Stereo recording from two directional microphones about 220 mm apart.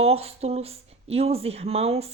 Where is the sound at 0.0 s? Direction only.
25° right (ahead or behind).